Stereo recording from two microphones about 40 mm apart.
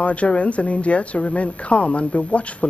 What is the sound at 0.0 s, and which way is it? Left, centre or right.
A woman's voice, left.